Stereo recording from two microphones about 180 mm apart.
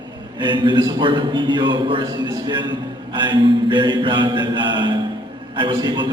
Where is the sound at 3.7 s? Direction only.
25° right (ahead or behind).